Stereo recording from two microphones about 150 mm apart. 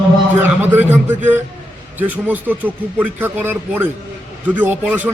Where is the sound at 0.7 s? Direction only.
15° right (ahead or behind).